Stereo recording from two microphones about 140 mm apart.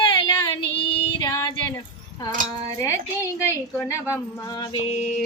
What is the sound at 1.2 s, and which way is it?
Female singing, 25° left (ahead or behind).